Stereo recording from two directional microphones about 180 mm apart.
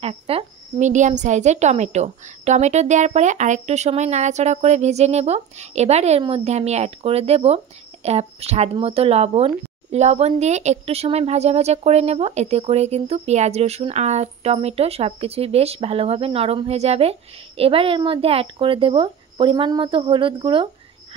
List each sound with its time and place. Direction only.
0.0 s a woman's voice: 35° right (ahead or behind)